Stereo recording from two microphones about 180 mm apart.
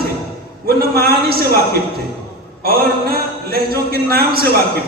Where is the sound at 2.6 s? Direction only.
60° right (ahead or behind).